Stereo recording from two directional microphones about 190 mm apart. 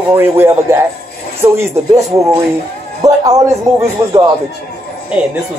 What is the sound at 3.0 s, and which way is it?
Speech, 20° right (ahead or behind).